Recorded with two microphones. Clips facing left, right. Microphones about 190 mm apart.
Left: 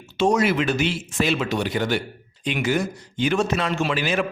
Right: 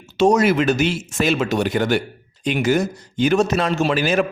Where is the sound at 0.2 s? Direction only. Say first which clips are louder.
Right 4 dB; 40° right (ahead or behind).